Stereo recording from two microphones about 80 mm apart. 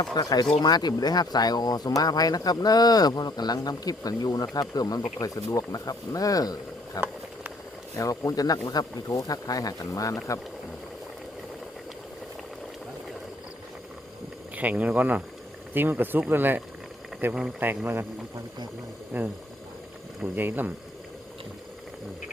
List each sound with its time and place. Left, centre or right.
0.0 s speech: left
14.5 s speech: centre
19.1 s speech: right